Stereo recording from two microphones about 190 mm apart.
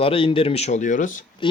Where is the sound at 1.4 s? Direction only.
25° left (ahead or behind).